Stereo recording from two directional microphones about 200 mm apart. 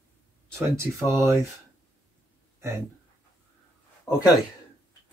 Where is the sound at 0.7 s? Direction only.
15° right (ahead or behind).